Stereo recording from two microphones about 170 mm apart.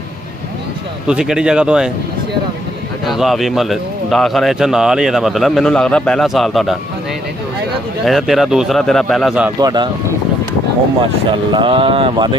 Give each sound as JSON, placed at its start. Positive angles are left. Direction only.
{"t": 1.0, "sound": "a man's voice", "side_deg": -5}
{"t": 3.1, "sound": "a man's voice", "side_deg": 0}
{"t": 8.0, "sound": "a man's voice", "side_deg": 0}
{"t": 9.6, "sound": "speech", "side_deg": -25}
{"t": 11.0, "sound": "speech", "side_deg": -30}